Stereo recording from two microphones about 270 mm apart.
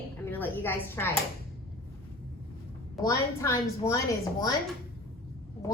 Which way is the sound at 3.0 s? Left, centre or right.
Centre.